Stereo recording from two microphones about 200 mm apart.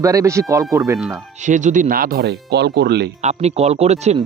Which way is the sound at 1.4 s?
40° right (ahead or behind).